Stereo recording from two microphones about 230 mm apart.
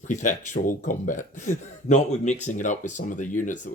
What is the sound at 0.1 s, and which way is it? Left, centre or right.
Speech, left.